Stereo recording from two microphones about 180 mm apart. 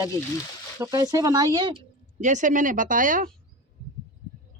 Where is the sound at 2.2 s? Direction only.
45° right (ahead or behind).